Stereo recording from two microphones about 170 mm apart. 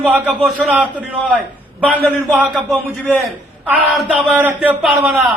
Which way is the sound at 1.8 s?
10° left (ahead or behind).